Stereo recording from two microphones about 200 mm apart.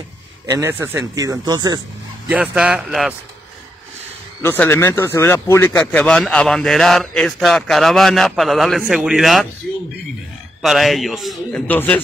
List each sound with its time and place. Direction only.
0.5 s speech: 15° right (ahead or behind)
2.2 s speech: 5° right (ahead or behind)
4.4 s speech: 10° left (ahead or behind)
10.6 s speech: centre (ahead or behind)